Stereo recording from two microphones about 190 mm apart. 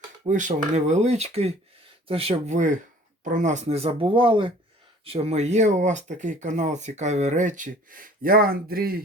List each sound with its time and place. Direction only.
0.3 s speech: 40° right (ahead or behind)